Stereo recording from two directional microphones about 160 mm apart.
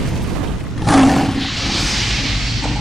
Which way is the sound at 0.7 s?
Centre (ahead or behind).